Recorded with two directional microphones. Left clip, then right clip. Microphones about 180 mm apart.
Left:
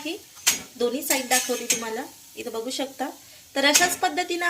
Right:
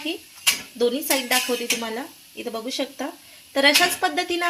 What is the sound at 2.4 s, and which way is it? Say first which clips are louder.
Speech: right 2 dB; 25° right (ahead or behind).